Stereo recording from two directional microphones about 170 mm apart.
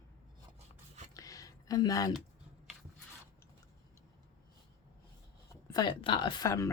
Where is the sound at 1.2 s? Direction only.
20° left (ahead or behind).